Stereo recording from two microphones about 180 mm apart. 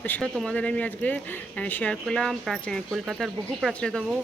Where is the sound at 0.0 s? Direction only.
5° left (ahead or behind).